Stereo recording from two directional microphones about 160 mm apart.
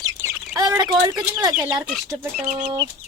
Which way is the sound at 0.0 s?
20° right (ahead or behind).